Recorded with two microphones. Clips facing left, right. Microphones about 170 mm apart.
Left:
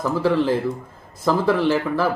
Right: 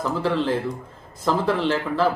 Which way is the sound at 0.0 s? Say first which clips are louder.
Left 3 dB; 10° left (ahead or behind).